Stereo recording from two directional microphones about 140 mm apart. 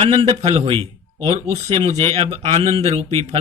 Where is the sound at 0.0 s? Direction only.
40° right (ahead or behind).